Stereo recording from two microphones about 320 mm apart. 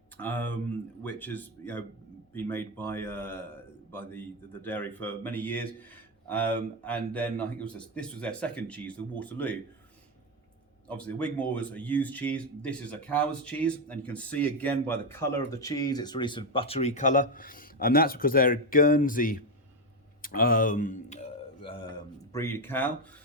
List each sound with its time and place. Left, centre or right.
0.2 s speech: centre
10.8 s speech: centre; by 19.4 s left
20.2 s a sound: left; by 22.9 s centre